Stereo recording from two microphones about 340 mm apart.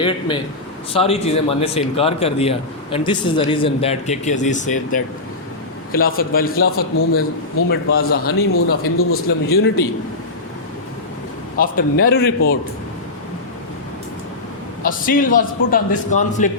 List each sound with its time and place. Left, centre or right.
0.9 s a man's voice: centre
7.7 s a man's voice: left
11.6 s a man's voice: left
14.8 s a man's voice: left